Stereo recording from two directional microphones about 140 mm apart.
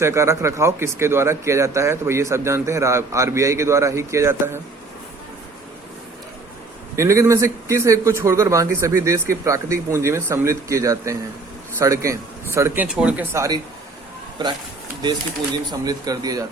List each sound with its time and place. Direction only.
0.0 s speech: 20° right (ahead or behind)
6.9 s speech: 20° right (ahead or behind)
13.3 s speech: 20° right (ahead or behind)
15.8 s speech: 25° right (ahead or behind)